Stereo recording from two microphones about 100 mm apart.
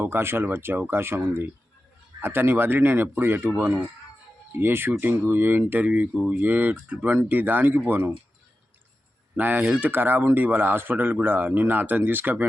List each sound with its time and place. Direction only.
0.0 s speech: 25° right (ahead or behind)
9.3 s speech: 20° right (ahead or behind)